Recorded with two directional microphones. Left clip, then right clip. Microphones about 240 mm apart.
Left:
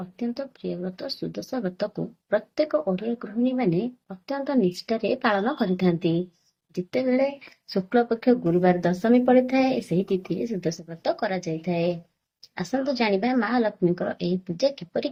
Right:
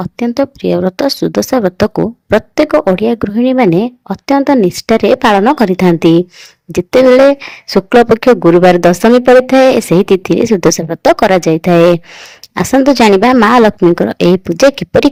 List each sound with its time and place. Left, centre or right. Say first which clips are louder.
0.2 s a woman's voice: right 18 dB; right